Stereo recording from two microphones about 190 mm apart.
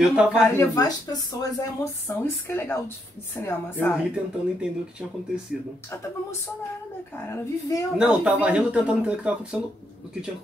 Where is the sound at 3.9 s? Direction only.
5° right (ahead or behind).